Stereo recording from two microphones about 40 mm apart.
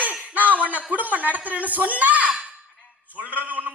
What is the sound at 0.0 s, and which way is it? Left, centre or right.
A man's voice, right.